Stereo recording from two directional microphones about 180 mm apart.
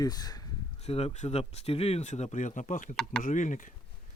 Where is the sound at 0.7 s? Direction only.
35° left (ahead or behind).